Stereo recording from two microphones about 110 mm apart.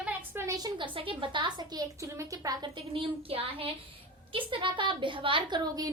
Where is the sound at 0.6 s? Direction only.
50° right (ahead or behind).